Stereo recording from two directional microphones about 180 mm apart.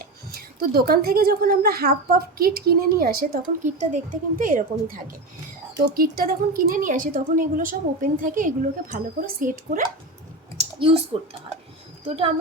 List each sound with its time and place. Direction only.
0.0 s a woman's voice: 60° right (ahead or behind)
10.6 s speech: 30° right (ahead or behind)